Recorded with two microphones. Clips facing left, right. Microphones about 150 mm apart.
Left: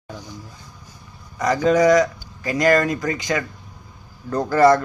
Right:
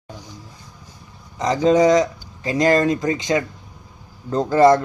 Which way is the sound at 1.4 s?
20° right (ahead or behind).